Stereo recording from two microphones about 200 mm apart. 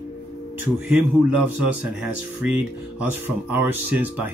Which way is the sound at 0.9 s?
5° right (ahead or behind).